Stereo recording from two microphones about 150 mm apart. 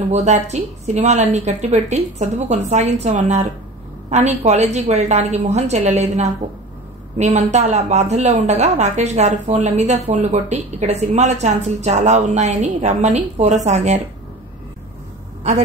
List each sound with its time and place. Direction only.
0.1 s a woman's voice: 50° right (ahead or behind)